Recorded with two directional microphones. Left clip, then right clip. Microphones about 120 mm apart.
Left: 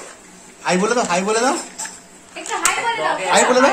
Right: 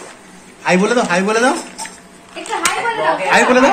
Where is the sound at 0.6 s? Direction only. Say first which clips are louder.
Right 4 dB; centre (ahead or behind).